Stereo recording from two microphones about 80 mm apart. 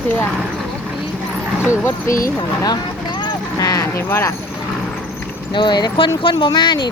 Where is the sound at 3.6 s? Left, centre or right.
Left.